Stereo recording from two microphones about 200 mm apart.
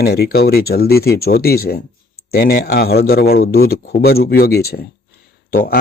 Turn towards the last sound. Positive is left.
turn(degrees=50)  # may be behind; listen again after turning